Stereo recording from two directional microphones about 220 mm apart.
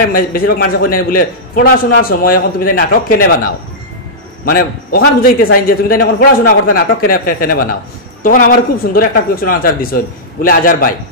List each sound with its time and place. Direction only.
0.1 s a man's voice: 40° left (ahead or behind)
4.5 s a man's voice: 40° left (ahead or behind)